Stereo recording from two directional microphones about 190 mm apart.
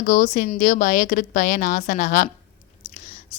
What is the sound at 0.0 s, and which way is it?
A woman's voice, 45° left (ahead or behind).